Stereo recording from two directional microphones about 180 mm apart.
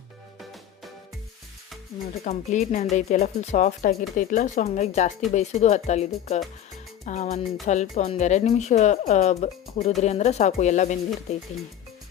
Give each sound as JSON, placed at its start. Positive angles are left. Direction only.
{"t": 2.2, "sound": "speech", "side_deg": 40}